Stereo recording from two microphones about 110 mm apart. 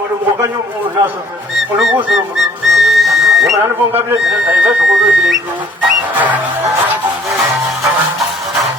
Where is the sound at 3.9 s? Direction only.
20° right (ahead or behind).